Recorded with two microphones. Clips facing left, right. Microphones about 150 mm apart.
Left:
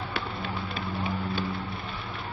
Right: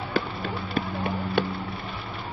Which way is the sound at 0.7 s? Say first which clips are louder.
Right 5 dB; 60° right (ahead or behind).